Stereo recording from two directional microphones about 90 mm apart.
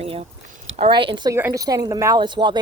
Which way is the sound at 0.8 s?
70° right (ahead or behind).